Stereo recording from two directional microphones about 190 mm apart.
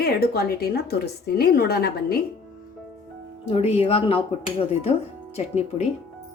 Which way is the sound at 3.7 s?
30° left (ahead or behind).